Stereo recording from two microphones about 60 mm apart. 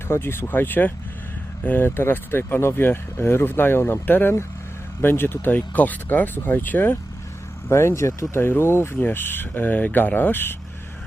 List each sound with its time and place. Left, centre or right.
0.1 s speech: left
7.7 s speech: left